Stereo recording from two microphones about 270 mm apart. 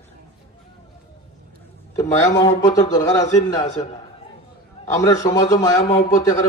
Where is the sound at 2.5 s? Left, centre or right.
Centre.